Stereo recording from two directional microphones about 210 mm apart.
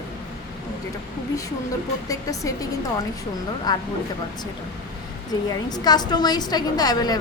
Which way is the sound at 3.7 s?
20° left (ahead or behind).